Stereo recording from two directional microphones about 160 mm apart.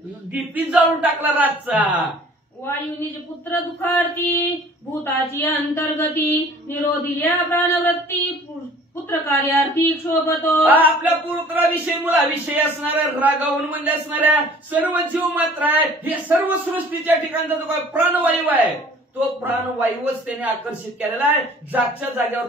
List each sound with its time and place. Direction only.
0.3 s a man's voice: 10° right (ahead or behind)
2.6 s speech: 15° left (ahead or behind)
9.1 s speech: 15° left (ahead or behind)
10.6 s a man's voice: 10° right (ahead or behind)